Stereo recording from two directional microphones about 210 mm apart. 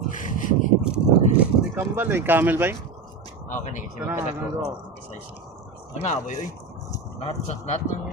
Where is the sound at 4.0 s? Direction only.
5° right (ahead or behind).